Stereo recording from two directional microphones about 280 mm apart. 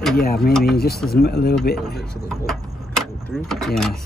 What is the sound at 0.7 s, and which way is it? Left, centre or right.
Speech, left.